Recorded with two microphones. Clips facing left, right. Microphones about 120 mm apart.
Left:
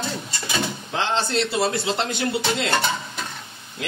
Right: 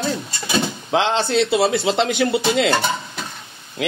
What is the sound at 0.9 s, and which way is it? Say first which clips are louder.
A man's voice: right 6 dB; 90° right.